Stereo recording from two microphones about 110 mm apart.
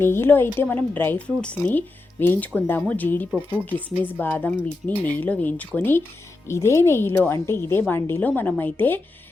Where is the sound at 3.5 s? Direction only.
15° left (ahead or behind).